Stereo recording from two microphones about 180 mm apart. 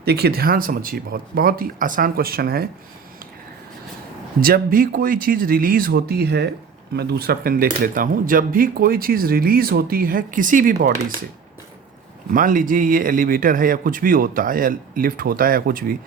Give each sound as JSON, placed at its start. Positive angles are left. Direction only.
{"t": 0.0, "sound": "speech", "side_deg": -60}
{"t": 4.4, "sound": "speech", "side_deg": -55}
{"t": 12.3, "sound": "speech", "side_deg": -50}